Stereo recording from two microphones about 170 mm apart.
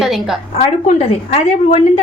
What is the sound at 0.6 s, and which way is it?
Speech, 45° left (ahead or behind).